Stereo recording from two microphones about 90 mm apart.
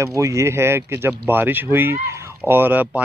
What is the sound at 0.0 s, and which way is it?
Speech, 35° right (ahead or behind).